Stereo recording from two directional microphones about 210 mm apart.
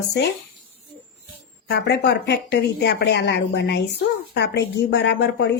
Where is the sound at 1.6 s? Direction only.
50° left (ahead or behind).